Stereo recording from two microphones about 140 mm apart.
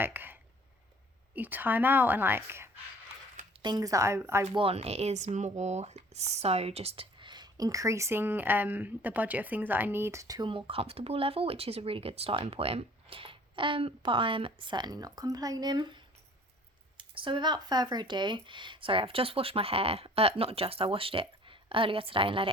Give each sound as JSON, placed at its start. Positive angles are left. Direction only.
{"t": 0.0, "sound": "a sound", "side_deg": -15}
{"t": 1.4, "sound": "a woman's voice", "side_deg": -15}
{"t": 3.6, "sound": "speech", "side_deg": -30}
{"t": 4.5, "sound": "speech", "side_deg": -45}
{"t": 10.7, "sound": "speech", "side_deg": -45}